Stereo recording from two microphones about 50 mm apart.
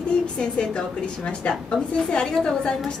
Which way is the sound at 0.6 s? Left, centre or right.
Centre.